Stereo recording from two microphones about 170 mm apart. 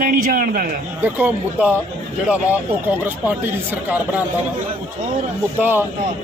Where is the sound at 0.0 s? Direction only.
55° right (ahead or behind).